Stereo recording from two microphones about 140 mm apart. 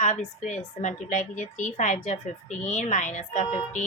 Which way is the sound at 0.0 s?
60° left (ahead or behind).